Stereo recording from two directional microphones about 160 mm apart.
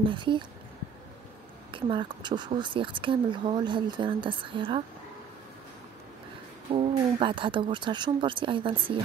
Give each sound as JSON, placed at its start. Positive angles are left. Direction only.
{"t": 0.0, "sound": "speech", "side_deg": -30}
{"t": 1.7, "sound": "speech", "side_deg": -30}
{"t": 6.9, "sound": "speech", "side_deg": -30}